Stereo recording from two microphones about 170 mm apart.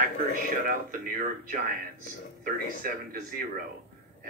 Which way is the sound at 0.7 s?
55° right (ahead or behind).